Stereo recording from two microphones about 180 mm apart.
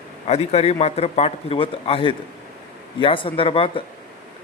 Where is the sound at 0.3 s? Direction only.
35° left (ahead or behind).